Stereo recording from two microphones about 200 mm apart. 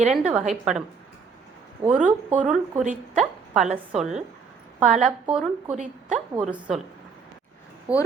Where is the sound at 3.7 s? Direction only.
5° right (ahead or behind).